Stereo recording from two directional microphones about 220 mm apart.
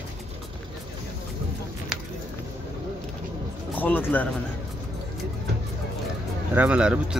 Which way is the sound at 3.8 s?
10° left (ahead or behind).